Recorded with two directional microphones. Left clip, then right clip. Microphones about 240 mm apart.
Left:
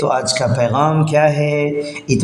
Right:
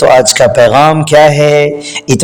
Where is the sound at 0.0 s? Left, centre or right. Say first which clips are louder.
Right 12 dB; right.